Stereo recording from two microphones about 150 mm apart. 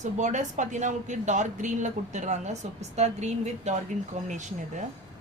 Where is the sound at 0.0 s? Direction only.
50° right (ahead or behind).